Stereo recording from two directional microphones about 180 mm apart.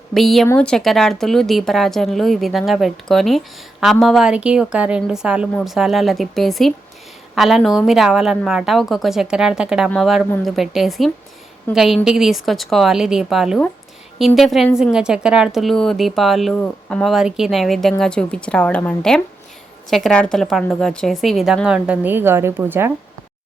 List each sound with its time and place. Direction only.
0.1 s a woman's voice: centre (ahead or behind)